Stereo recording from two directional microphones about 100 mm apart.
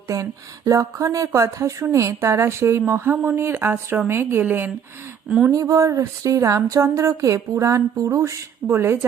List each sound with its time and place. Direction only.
0.1 s speech: 35° right (ahead or behind)
5.5 s speech: 35° right (ahead or behind)